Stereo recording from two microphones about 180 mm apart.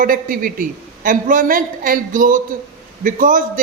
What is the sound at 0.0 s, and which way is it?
A man's voice, 50° right (ahead or behind).